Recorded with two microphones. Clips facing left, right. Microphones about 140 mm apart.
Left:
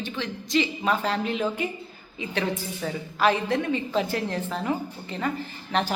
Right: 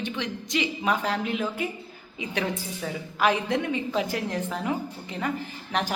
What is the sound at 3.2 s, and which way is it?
A woman's voice, 15° right (ahead or behind).